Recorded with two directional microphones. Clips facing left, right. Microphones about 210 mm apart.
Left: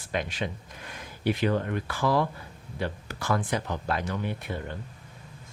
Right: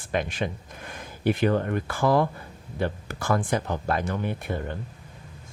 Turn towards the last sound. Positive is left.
turn(degrees=-50)  # may be behind; listen again after turning